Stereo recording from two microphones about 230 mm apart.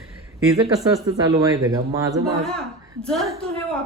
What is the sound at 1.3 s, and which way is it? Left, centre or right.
Speech, centre.